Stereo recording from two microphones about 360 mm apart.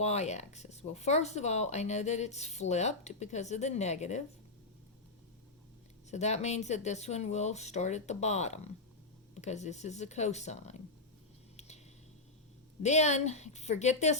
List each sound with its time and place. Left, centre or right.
0.0 s speech: centre
6.1 s speech: centre
12.8 s speech: centre